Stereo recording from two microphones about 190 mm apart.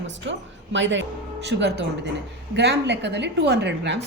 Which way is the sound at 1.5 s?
65° right (ahead or behind).